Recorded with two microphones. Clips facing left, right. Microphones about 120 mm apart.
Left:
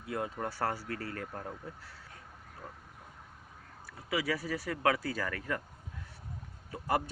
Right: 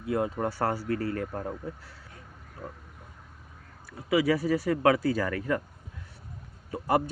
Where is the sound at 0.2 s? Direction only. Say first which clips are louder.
Right 5 dB; 65° right (ahead or behind).